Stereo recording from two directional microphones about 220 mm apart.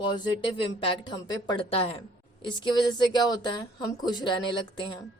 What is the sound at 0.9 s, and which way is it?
Speech, 20° left (ahead or behind).